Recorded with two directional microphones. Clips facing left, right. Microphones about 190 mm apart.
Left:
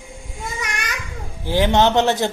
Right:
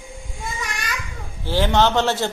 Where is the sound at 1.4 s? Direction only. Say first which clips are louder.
Left 2 dB; 15° left (ahead or behind).